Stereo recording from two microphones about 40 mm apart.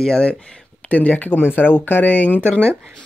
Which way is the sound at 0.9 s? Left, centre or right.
Left.